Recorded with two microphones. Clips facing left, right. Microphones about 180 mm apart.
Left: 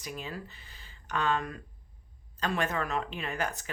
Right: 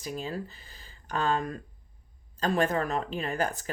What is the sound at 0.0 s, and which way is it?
Speech, 35° right (ahead or behind).